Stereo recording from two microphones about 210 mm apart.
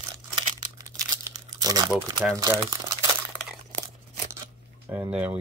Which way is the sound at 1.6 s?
15° right (ahead or behind).